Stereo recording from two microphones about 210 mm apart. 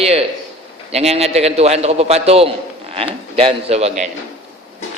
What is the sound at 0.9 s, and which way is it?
A man's voice, 30° right (ahead or behind).